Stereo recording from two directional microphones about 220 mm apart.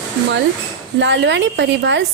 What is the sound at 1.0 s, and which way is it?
A woman's voice, 55° right (ahead or behind).